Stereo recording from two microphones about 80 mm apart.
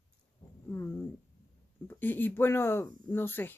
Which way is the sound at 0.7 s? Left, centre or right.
Left.